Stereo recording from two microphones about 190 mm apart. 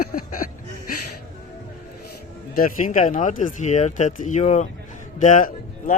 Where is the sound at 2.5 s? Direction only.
45° left (ahead or behind).